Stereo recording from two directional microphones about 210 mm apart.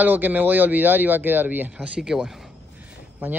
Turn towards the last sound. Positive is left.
turn(degrees=-5)  # may be behind; listen again after turning